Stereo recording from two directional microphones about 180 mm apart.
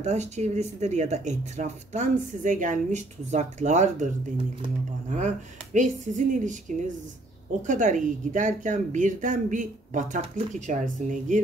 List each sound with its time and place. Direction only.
0.0 s speech: 40° right (ahead or behind)
5.1 s speech: 45° right (ahead or behind)